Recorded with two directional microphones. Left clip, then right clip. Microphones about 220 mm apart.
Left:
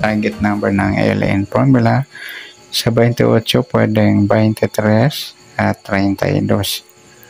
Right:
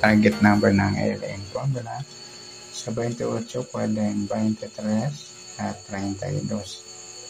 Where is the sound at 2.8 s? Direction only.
60° left (ahead or behind).